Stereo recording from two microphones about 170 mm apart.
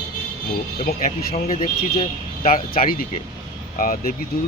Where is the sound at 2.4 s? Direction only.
55° left (ahead or behind).